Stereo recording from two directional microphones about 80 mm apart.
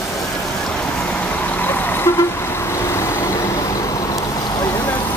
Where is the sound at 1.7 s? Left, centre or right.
Left.